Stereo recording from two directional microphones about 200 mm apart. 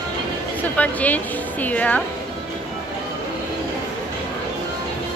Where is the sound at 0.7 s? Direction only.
10° left (ahead or behind).